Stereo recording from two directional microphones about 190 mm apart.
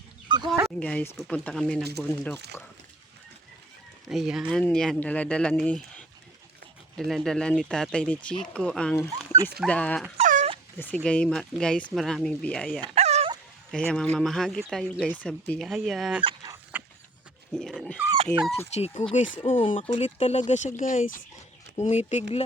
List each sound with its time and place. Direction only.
0.3 s a sound: 25° right (ahead or behind)
0.8 s speech: 5° left (ahead or behind)
4.1 s speech: centre (ahead or behind)
10.2 s dog: 35° right (ahead or behind)
10.8 s speech: 10° left (ahead or behind)
12.8 s dog: 35° right (ahead or behind)
13.7 s speech: 5° left (ahead or behind)
16.7 s horse: 10° right (ahead or behind)
17.5 s dog: 5° left (ahead or behind)
18.7 s speech: 35° left (ahead or behind)